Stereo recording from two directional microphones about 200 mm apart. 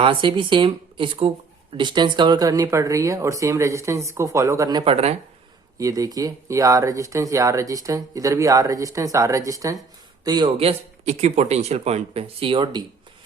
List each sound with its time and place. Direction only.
0.0 s speech: 25° right (ahead or behind)
5.7 s speech: 15° right (ahead or behind)